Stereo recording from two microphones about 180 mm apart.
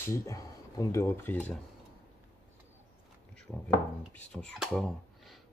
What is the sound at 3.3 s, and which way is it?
Speech, 5° left (ahead or behind).